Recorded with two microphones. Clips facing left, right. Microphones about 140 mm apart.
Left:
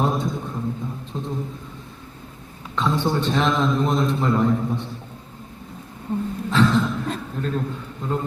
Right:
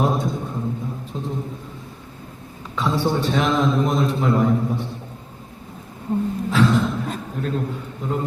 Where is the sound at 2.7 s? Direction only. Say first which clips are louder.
Right 1 dB; 10° right (ahead or behind).